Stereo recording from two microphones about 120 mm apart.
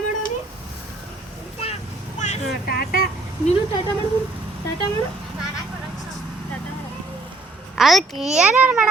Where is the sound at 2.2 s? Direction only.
70° left (ahead or behind).